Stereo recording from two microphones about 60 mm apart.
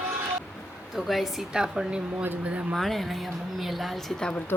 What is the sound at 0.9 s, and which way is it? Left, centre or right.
Speech, centre.